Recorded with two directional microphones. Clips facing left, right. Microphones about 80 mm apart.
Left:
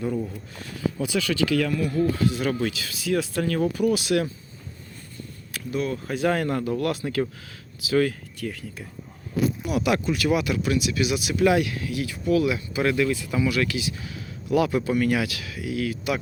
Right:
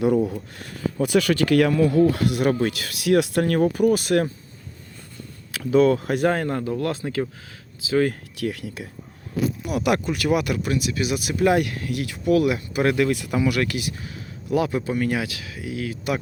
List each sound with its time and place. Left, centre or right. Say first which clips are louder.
0.3 s speech: right 3 dB; right
2.5 s speech: right 4 dB; right
2.7 s speech: right 6 dB; right
5.5 s speech: right 10 dB; right
6.2 s speech: even; right
8.4 s speech: right 5 dB; right
9.7 s speech: right 2 dB; right
13.1 s speech: right 2 dB; right
13.3 s speech: right 2 dB; right
13.9 s speech: even; right